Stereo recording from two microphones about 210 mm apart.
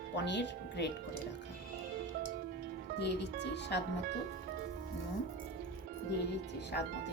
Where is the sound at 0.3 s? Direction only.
55° left (ahead or behind).